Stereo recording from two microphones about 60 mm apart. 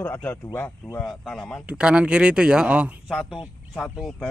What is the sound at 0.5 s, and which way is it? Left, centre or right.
Speech, left.